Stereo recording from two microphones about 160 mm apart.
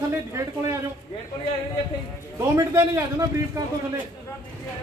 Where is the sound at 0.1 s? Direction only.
15° right (ahead or behind).